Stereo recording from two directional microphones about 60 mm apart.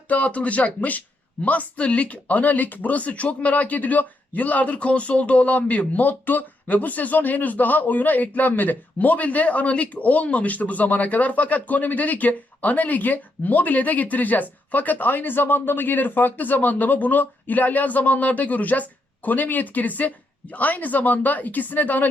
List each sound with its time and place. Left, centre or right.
0.1 s speech: left